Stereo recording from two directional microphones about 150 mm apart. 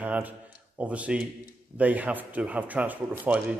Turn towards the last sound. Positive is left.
turn(degrees=-10)  # may be behind; listen again after turning